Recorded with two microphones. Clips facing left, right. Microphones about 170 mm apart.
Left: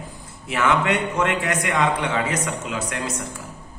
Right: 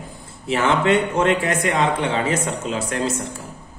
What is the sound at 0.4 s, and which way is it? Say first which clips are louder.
A man's voice: right 2 dB; 30° right (ahead or behind).